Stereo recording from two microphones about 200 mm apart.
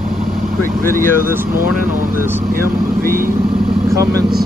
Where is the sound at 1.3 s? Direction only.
10° right (ahead or behind).